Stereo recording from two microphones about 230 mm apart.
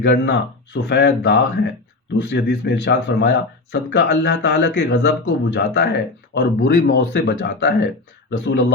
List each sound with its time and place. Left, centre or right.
0.0 s speech: left